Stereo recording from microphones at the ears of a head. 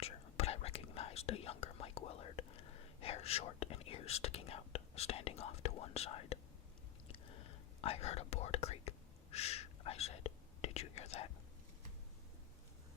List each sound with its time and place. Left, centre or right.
0.0 s whispering: left